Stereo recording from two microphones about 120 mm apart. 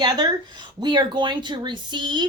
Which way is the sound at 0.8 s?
40° right (ahead or behind).